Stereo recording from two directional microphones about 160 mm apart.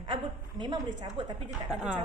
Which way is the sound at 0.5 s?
25° right (ahead or behind).